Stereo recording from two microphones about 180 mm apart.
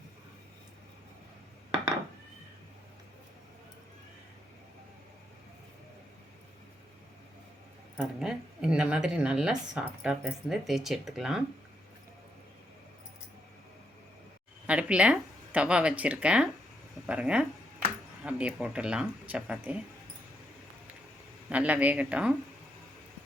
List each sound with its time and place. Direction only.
7.9 s speech: 5° right (ahead or behind)
14.7 s speech: 5° right (ahead or behind)
21.5 s speech: 10° right (ahead or behind)